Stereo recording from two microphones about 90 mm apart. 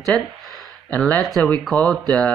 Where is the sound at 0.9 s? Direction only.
15° left (ahead or behind).